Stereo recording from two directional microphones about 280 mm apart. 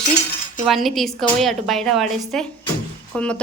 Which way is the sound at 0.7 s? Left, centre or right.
Centre.